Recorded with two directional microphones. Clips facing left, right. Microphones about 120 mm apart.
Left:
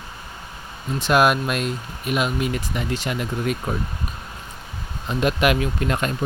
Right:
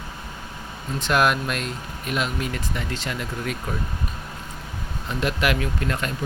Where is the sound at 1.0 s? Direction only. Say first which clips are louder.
Left 3 dB; 20° left (ahead or behind).